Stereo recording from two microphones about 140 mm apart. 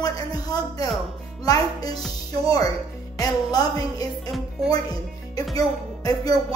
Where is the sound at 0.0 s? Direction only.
30° left (ahead or behind).